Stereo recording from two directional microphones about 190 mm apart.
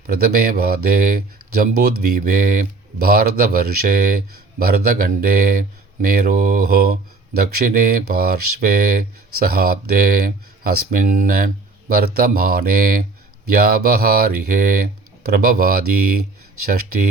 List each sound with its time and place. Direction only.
0.1 s speech: 50° right (ahead or behind)